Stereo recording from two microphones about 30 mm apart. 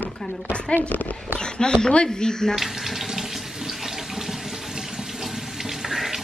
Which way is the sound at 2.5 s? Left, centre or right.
Centre.